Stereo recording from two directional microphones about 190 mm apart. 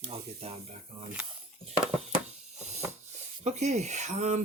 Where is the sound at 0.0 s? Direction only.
30° right (ahead or behind).